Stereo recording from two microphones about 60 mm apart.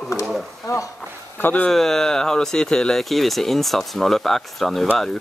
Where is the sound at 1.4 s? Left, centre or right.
Left.